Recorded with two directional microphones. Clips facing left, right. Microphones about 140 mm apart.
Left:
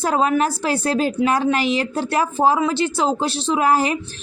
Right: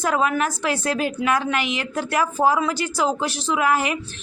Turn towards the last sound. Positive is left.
turn(degrees=35)  # may be behind; listen again after turning